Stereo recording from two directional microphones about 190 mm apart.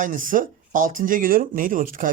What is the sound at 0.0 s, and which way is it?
Speech, 45° right (ahead or behind).